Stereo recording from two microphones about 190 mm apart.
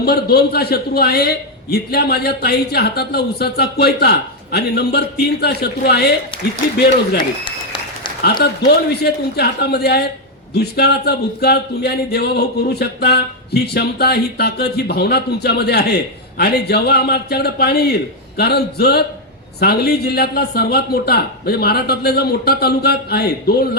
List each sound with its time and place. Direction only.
0.0 s a man's voice: 55° left (ahead or behind)
8.6 s a man's voice: 55° left (ahead or behind)